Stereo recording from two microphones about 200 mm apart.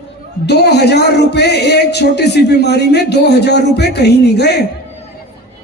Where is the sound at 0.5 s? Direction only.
55° left (ahead or behind).